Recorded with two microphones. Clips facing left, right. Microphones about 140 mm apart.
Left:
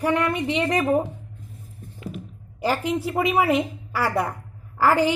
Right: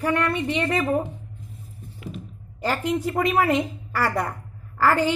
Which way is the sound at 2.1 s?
10° left (ahead or behind).